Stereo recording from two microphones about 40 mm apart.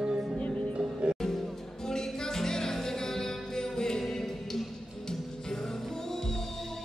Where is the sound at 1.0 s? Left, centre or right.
Right.